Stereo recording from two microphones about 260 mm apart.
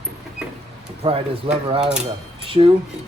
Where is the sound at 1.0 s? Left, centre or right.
Right.